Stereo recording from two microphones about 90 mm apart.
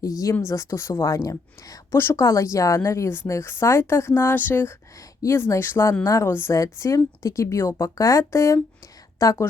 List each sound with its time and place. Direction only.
0.0 s speech: 40° left (ahead or behind); by 4.7 s 25° left (ahead or behind)
5.2 s a woman's voice: 35° left (ahead or behind)